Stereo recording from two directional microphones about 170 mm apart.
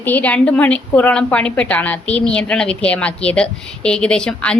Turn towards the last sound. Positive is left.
turn(degrees=5)  # may be behind; listen again after turning